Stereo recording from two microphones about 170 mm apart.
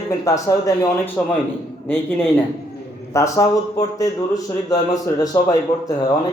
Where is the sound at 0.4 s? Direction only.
20° left (ahead or behind).